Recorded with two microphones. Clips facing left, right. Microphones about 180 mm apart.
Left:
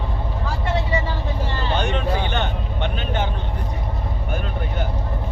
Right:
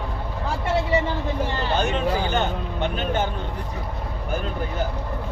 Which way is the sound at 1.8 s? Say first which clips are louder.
Even; 5° right (ahead or behind).